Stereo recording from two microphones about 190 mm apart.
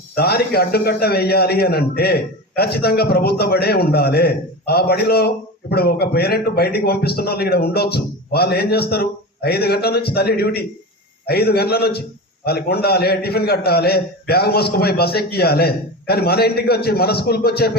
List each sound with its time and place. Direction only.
0.2 s a man's voice: 55° left (ahead or behind)